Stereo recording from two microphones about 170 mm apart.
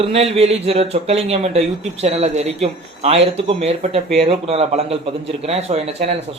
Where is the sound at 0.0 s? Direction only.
35° right (ahead or behind).